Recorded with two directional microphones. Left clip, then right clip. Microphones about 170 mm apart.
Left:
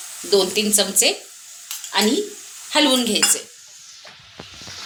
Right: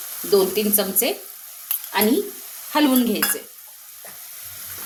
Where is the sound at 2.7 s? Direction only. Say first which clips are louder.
Left 2 dB; 35° right (ahead or behind).